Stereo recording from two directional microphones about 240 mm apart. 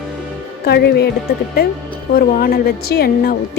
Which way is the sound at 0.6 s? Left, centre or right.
Left.